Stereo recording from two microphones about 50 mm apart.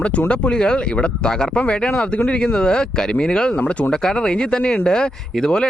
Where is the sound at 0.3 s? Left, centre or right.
Left.